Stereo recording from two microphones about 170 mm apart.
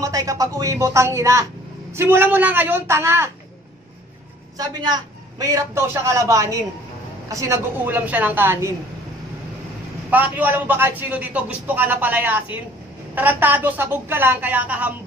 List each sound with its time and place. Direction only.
0.0 s a man's voice: 20° right (ahead or behind)
4.6 s a man's voice: 20° right (ahead or behind)
10.0 s a man's voice: 10° right (ahead or behind)